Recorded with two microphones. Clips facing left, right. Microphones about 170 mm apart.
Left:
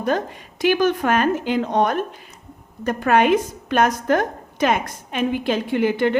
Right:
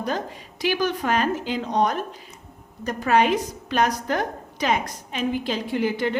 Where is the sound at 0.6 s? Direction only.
50° left (ahead or behind).